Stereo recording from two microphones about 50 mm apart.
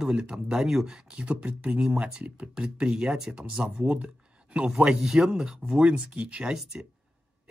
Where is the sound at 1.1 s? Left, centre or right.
Right.